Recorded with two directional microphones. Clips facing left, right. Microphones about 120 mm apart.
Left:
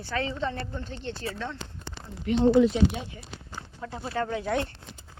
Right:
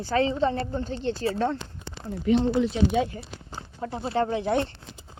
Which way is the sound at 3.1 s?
35° right (ahead or behind).